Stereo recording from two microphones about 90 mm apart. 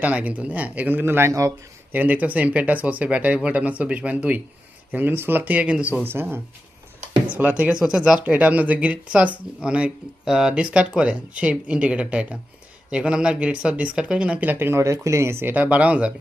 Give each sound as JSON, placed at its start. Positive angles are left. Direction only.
{"t": 0.0, "sound": "speech", "side_deg": -15}
{"t": 1.9, "sound": "speech", "side_deg": -20}
{"t": 8.2, "sound": "speech", "side_deg": -20}
{"t": 14.5, "sound": "speech", "side_deg": -25}